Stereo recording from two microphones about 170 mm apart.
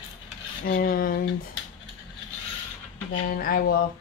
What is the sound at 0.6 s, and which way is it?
Speech, 55° left (ahead or behind).